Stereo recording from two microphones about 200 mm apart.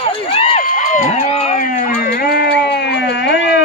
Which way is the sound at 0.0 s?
30° left (ahead or behind).